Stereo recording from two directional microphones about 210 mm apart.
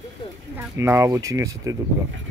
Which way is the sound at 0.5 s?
15° right (ahead or behind).